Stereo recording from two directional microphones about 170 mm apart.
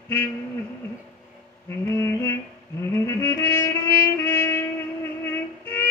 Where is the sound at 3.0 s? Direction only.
15° left (ahead or behind).